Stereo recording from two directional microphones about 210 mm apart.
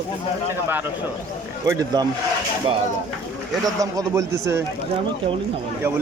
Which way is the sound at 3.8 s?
15° right (ahead or behind).